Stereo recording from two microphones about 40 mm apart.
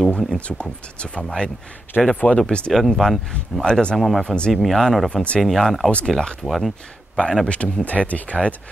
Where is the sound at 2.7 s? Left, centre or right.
Centre.